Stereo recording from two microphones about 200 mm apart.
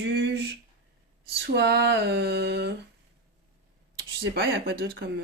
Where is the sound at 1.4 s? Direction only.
55° right (ahead or behind).